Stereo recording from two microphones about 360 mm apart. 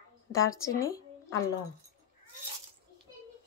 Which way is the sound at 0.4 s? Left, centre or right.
Left.